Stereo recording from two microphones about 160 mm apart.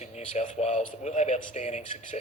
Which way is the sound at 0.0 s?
45° left (ahead or behind).